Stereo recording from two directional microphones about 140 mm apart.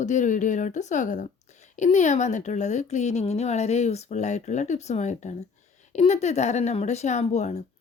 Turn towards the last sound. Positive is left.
turn(degrees=55)  # may be behind; listen again after turning